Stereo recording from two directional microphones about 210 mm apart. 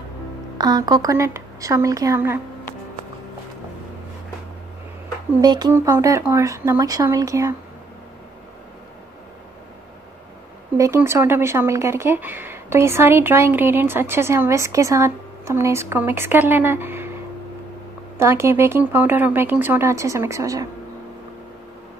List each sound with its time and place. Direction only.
0.6 s speech: 20° right (ahead or behind)
5.4 s speech: 20° right (ahead or behind)
10.8 s speech: 10° right (ahead or behind)